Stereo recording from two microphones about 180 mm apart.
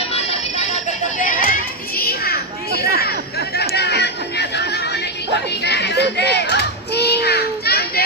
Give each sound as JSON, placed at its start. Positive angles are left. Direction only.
{"t": 0.1, "sound": "music", "side_deg": 35}
{"t": 2.0, "sound": "children playing", "side_deg": 55}
{"t": 3.8, "sound": "music", "side_deg": 65}
{"t": 5.6, "sound": "children playing", "side_deg": 70}